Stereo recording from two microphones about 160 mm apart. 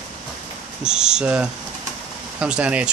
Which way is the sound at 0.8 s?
5° right (ahead or behind).